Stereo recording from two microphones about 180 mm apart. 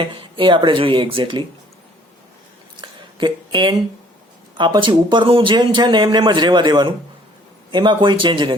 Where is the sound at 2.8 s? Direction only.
25° right (ahead or behind).